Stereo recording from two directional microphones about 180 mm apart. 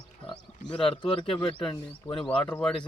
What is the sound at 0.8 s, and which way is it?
Speech, 30° left (ahead or behind).